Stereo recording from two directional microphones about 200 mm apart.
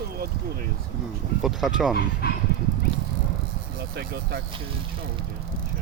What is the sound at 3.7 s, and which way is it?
Speech, 50° right (ahead or behind).